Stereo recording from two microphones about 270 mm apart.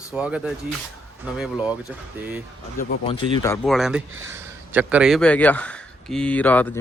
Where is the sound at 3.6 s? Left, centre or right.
Centre.